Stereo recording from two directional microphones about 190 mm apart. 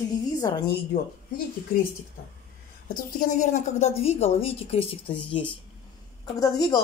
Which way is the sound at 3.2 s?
40° left (ahead or behind).